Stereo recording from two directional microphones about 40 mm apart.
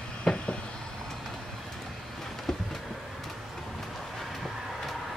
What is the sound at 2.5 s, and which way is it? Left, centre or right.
Vehicle, centre.